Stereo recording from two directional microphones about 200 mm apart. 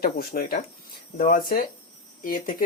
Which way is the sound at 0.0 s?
50° left (ahead or behind).